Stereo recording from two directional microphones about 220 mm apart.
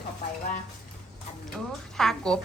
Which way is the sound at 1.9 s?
Centre (ahead or behind).